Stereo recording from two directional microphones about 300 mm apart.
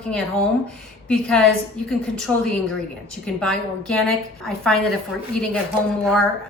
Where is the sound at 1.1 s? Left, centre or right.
Centre.